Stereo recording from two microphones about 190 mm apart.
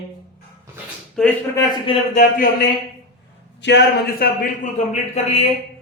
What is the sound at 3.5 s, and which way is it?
A man's voice, 65° left (ahead or behind).